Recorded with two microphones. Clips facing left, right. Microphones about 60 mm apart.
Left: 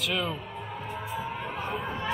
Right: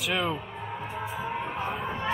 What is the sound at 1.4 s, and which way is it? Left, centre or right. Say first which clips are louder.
Music: right 2 dB; centre.